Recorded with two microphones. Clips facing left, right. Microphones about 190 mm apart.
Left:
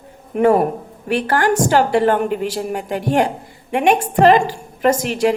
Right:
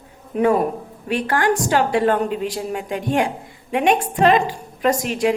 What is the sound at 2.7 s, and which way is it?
Speech, 45° left (ahead or behind).